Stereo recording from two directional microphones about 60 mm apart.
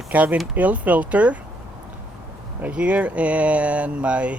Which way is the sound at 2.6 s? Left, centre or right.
Right.